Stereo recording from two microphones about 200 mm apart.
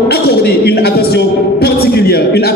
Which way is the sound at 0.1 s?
50° left (ahead or behind).